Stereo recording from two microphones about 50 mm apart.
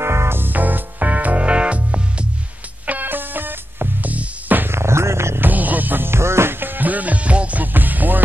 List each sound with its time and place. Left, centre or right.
0.0 s music: right
2.9 s music: right
4.6 s music: right
5.4 s music: right
6.6 s music: right